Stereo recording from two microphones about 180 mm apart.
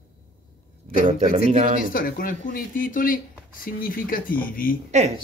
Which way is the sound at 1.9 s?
50° left (ahead or behind).